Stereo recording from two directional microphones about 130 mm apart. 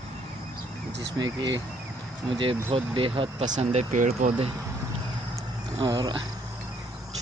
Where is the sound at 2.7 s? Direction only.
40° right (ahead or behind).